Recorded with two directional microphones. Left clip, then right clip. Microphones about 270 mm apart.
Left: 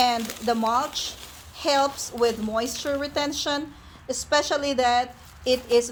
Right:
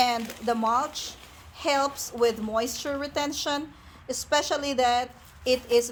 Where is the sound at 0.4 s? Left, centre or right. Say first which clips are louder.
Left 1 dB; centre.